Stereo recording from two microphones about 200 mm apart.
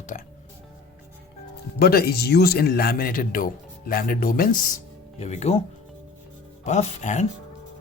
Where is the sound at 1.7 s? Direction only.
50° left (ahead or behind).